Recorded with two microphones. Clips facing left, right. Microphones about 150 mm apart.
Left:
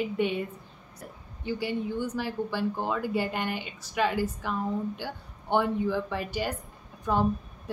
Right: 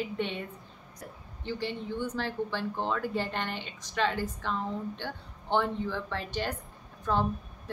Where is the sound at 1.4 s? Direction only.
10° left (ahead or behind).